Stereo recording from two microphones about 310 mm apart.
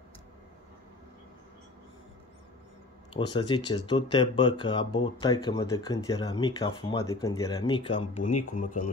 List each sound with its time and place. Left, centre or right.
3.1 s speech: centre